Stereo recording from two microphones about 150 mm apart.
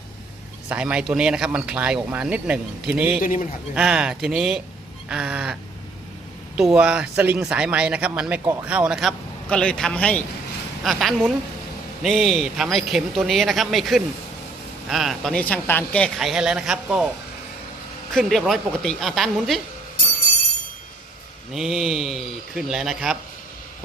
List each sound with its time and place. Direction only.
0.7 s speech: 5° right (ahead or behind)
3.2 s a man's voice: 65° left (ahead or behind)
3.8 s speech: 5° right (ahead or behind)
6.6 s speech: 5° right (ahead or behind)
18.1 s speech: centre (ahead or behind)
21.5 s speech: centre (ahead or behind)